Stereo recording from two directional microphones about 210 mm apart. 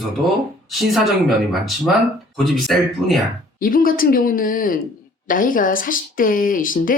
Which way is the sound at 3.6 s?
40° left (ahead or behind).